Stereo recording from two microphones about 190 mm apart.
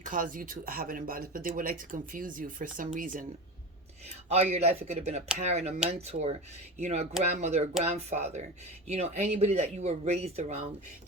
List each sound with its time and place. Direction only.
0.0 s speech: 45° right (ahead or behind)
4.3 s speech: 35° right (ahead or behind)